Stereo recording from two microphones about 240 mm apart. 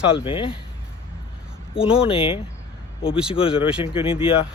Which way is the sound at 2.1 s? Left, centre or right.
Left.